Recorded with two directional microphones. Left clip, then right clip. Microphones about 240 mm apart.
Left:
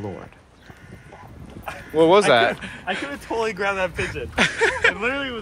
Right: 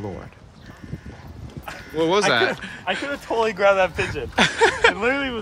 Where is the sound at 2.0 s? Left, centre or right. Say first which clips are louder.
Left 4 dB; centre.